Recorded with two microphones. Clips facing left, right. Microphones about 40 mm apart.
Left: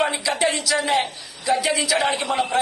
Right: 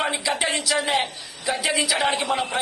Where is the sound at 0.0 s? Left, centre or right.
Centre.